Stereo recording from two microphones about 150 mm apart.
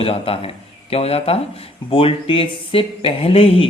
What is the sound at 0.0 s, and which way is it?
A man's voice, 40° left (ahead or behind).